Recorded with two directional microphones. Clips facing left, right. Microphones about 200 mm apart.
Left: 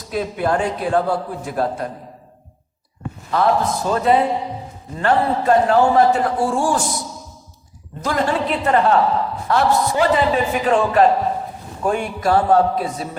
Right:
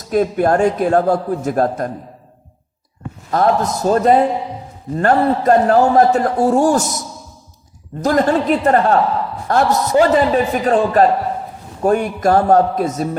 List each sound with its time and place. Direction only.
0.1 s a man's voice: 45° right (ahead or behind)
3.3 s a man's voice: 45° right (ahead or behind)
8.0 s a man's voice: 45° right (ahead or behind)